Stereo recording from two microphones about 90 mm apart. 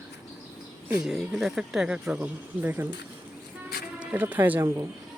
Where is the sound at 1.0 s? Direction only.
5° right (ahead or behind).